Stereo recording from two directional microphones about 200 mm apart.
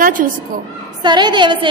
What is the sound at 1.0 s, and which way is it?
Speech, 20° right (ahead or behind).